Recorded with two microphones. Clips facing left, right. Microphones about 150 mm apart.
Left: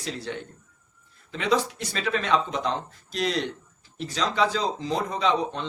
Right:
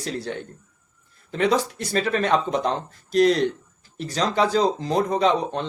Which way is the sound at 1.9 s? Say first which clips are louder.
Right 4 dB; 45° right (ahead or behind).